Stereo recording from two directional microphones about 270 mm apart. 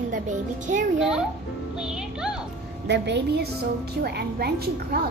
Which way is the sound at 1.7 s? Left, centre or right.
Centre.